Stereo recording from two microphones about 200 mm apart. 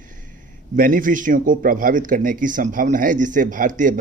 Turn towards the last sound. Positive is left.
turn(degrees=-40)  # may be behind; listen again after turning